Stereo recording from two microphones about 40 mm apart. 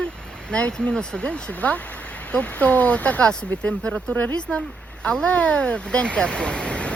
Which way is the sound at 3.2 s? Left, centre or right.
Left.